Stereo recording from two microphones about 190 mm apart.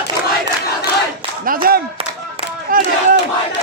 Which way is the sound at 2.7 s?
50° right (ahead or behind).